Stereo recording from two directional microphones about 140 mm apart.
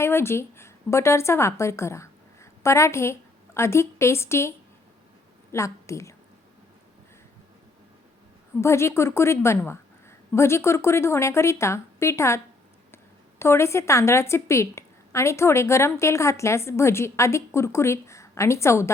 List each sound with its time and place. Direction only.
0.0 s a woman's voice: 20° left (ahead or behind)
8.6 s a woman's voice: 20° left (ahead or behind)
13.4 s a woman's voice: 20° left (ahead or behind)